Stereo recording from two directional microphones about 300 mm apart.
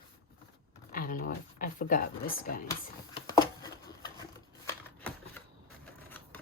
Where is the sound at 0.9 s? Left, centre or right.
Left.